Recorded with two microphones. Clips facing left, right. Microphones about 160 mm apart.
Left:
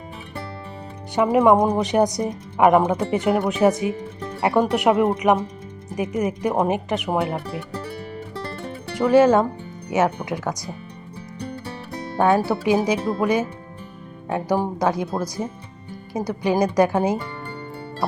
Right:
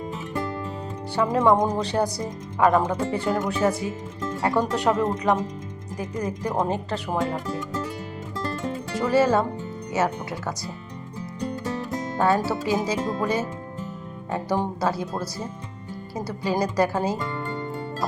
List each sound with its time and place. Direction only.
1.1 s speech: 15° left (ahead or behind)
9.0 s speech: 15° left (ahead or behind)
12.5 s speech: 15° left (ahead or behind)